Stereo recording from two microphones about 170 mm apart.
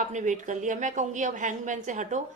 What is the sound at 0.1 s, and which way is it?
A woman's voice, 45° right (ahead or behind).